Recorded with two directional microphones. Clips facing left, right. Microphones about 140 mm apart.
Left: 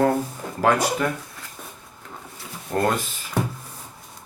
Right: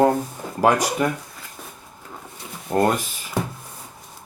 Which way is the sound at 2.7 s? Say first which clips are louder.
Right 4 dB; 40° right (ahead or behind).